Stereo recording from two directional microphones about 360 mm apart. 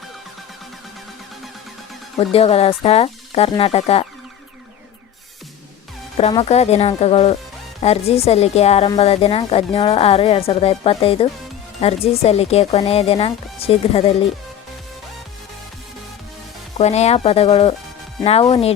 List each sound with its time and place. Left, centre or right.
2.1 s speech: centre
6.1 s speech: centre
16.7 s speech: centre